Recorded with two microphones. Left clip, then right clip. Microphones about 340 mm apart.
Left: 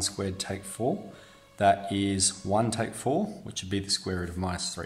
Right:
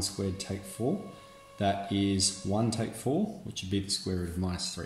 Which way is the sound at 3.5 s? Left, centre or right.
Left.